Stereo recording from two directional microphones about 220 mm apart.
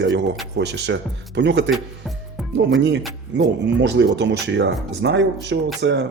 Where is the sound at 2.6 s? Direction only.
55° right (ahead or behind).